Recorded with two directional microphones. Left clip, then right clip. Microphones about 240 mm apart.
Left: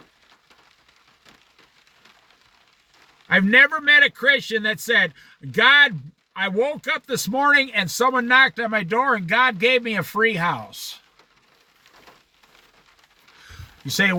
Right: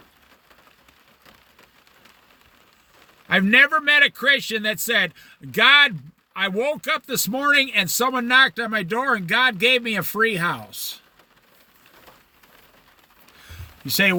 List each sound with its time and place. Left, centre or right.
3.2 s speech: centre
13.9 s speech: centre